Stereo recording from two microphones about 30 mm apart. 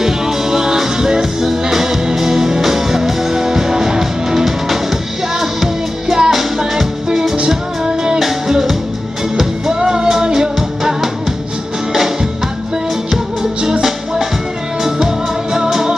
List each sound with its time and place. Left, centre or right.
0.0 s music: centre
7.3 s music: right
9.7 s music: right
13.4 s music: right